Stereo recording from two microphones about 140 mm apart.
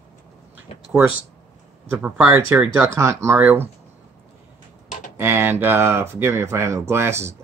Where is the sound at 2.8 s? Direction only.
20° right (ahead or behind).